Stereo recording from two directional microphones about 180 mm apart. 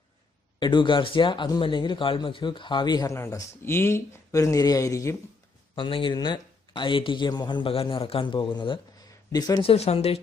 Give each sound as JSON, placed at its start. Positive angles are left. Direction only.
{"t": 0.6, "sound": "speech", "side_deg": 25}
{"t": 5.7, "sound": "speech", "side_deg": 30}